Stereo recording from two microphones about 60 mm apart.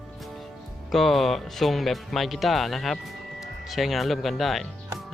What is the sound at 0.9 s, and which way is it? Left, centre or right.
Speech, centre.